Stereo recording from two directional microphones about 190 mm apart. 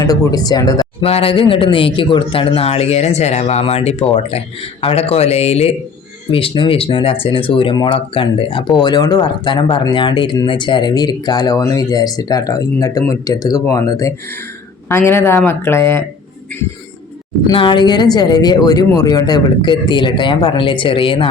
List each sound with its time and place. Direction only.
0.0 s speech: 20° left (ahead or behind)
1.0 s a man's voice: 30° left (ahead or behind); by 16.0 s 15° left (ahead or behind)
17.4 s speech: 25° left (ahead or behind)